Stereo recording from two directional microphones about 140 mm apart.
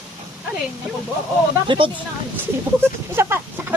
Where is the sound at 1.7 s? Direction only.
35° right (ahead or behind).